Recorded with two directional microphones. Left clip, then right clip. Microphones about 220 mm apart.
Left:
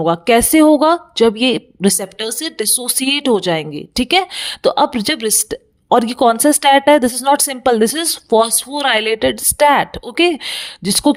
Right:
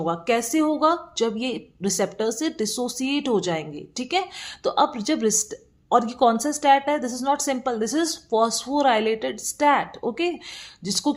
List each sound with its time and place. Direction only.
0.0 s speech: 40° left (ahead or behind)